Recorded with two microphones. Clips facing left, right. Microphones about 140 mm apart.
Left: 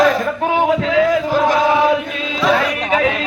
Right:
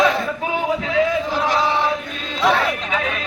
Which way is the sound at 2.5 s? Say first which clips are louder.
Left 6 dB; 90° left.